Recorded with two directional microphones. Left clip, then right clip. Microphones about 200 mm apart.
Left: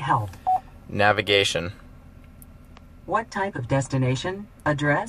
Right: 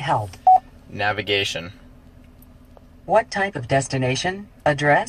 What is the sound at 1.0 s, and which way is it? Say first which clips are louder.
Speech: left 2 dB; 45° left (ahead or behind).